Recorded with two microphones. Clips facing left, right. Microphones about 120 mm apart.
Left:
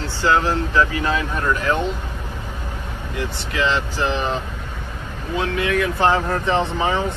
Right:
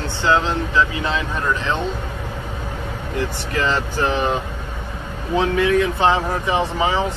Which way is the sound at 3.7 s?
55° right (ahead or behind).